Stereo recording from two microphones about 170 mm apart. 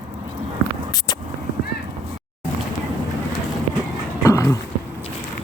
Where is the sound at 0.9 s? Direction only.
25° left (ahead or behind).